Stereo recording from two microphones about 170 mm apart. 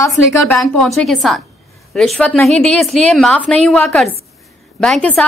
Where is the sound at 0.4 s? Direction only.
5° left (ahead or behind).